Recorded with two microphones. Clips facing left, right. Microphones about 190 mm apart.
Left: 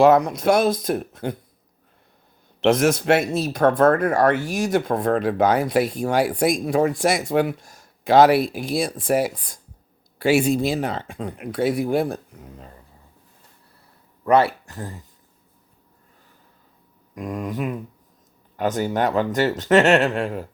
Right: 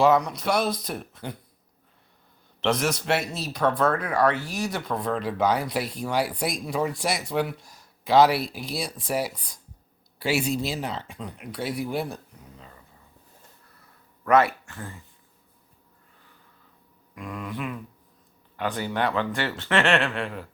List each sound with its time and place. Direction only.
0.0 s speech: 50° left (ahead or behind)
2.6 s speech: 50° left (ahead or behind)
14.3 s speech: 30° left (ahead or behind)
17.2 s speech: 45° left (ahead or behind)